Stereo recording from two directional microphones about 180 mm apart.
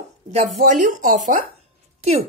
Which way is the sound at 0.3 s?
40° right (ahead or behind).